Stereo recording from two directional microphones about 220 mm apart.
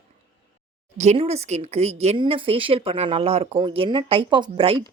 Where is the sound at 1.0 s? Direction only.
30° right (ahead or behind).